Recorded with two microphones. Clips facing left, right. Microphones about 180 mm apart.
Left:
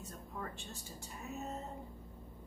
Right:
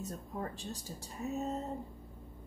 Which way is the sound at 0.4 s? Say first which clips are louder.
Right 4 dB; 35° right (ahead or behind).